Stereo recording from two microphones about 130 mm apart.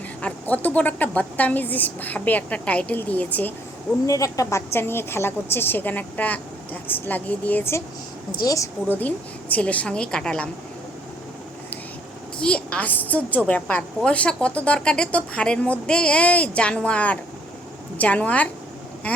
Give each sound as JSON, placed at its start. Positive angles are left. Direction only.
{"t": 0.2, "sound": "a woman's voice", "side_deg": 10}
{"t": 4.0, "sound": "a woman's voice", "side_deg": 25}
{"t": 9.0, "sound": "a woman's voice", "side_deg": 10}
{"t": 12.4, "sound": "a woman's voice", "side_deg": 10}